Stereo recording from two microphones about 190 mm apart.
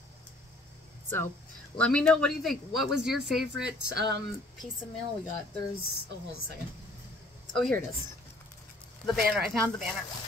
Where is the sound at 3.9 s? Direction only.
60° right (ahead or behind).